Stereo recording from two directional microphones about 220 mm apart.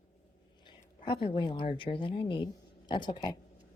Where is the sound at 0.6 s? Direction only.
20° left (ahead or behind).